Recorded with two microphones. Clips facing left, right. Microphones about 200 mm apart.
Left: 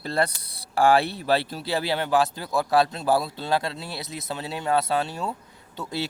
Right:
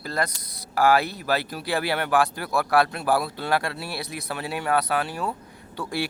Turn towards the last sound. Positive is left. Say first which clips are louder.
# right 2 dB
turn(degrees=20)  # may be behind; listen again after turning